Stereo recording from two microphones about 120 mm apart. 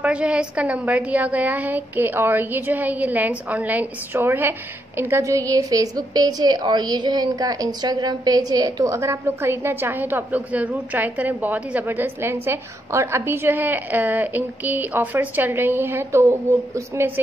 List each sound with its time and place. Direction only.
0.0 s a woman's voice: 10° right (ahead or behind); by 17.1 s 25° right (ahead or behind)